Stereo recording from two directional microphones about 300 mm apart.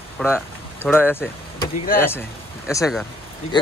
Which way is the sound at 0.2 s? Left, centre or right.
Centre.